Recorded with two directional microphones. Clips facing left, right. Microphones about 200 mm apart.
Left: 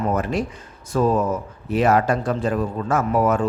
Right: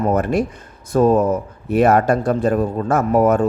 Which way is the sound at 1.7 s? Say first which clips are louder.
Right 4 dB; 60° right (ahead or behind).